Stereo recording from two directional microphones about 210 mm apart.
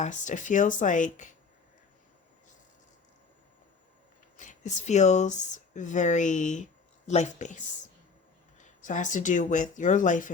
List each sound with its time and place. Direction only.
0.0 s speech: 35° left (ahead or behind)
4.4 s speech: 35° left (ahead or behind)
8.8 s speech: 35° left (ahead or behind)